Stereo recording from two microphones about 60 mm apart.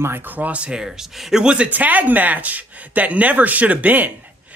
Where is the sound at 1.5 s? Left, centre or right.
Right.